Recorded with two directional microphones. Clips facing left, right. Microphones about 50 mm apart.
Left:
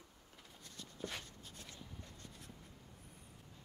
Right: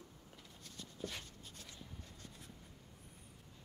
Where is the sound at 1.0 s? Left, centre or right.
Centre.